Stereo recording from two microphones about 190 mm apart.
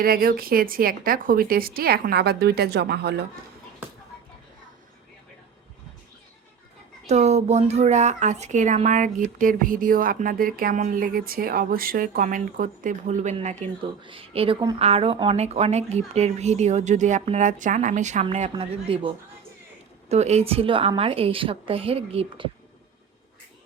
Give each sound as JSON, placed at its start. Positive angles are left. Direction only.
{"t": 0.0, "sound": "speech", "side_deg": -50}
{"t": 7.1, "sound": "a woman's voice", "side_deg": -35}